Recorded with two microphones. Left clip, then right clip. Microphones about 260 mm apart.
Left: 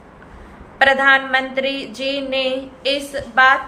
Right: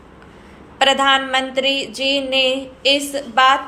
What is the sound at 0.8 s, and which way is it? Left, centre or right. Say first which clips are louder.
A woman's voice: left 1 dB; centre.